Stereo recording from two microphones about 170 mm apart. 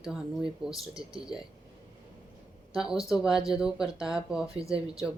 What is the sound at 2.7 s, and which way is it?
Speech, 5° right (ahead or behind).